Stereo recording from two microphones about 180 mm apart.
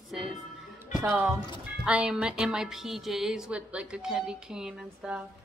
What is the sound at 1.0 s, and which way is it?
A woman's voice, 5° right (ahead or behind).